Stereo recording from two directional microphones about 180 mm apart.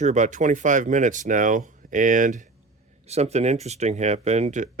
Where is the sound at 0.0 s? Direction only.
40° right (ahead or behind).